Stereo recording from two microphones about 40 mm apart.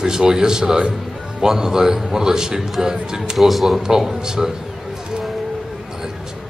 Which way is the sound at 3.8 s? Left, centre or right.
Centre.